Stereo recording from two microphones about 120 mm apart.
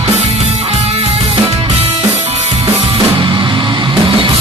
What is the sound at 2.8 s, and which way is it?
Music, 45° right (ahead or behind).